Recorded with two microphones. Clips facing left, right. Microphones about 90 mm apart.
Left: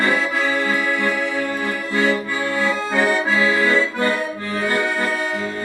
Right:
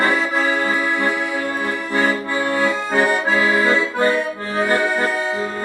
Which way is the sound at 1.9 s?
40° right (ahead or behind).